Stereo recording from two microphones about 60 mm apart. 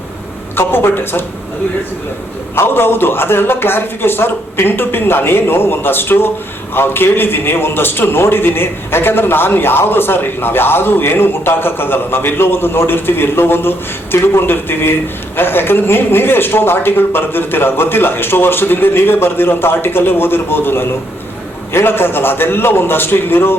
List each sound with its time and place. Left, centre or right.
0.5 s a man's voice: left
2.6 s a man's voice: left